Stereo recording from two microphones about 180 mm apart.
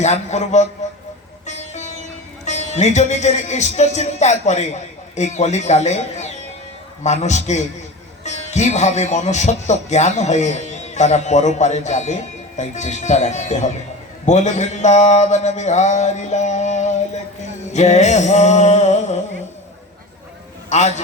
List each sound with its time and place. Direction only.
0.0 s speech: 40° left (ahead or behind)
20.7 s a man's voice: 40° left (ahead or behind)